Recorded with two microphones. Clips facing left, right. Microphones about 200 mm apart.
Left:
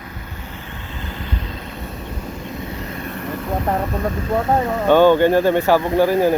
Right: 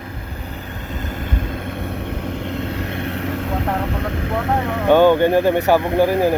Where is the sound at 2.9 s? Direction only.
70° right (ahead or behind).